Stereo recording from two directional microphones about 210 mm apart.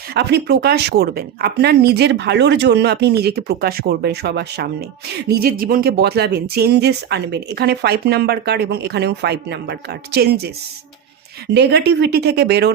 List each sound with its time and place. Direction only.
0.1 s speech: 55° right (ahead or behind)
11.5 s speech: 55° right (ahead or behind)